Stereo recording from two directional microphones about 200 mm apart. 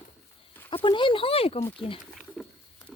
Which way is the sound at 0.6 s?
25° left (ahead or behind).